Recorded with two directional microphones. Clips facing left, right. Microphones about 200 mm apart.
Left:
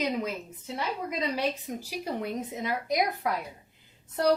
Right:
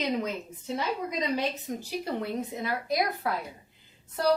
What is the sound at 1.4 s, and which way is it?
Speech, 15° left (ahead or behind).